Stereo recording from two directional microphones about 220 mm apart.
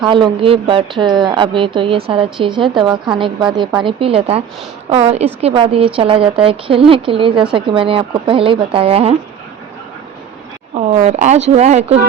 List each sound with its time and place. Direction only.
0.1 s a woman's voice: 25° right (ahead or behind)
10.8 s speech: 30° right (ahead or behind)